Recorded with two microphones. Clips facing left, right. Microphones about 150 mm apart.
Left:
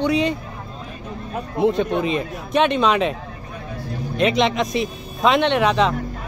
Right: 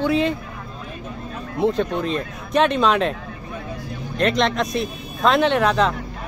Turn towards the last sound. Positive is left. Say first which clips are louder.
# even
turn(degrees=0)  # may be behind; listen again after turning